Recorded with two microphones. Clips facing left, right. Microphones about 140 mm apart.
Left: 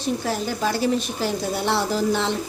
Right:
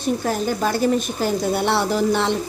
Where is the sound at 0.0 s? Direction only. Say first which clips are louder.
Right 3 dB; 50° right (ahead or behind).